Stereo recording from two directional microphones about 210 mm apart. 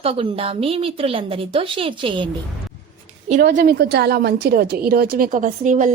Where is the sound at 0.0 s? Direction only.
25° right (ahead or behind).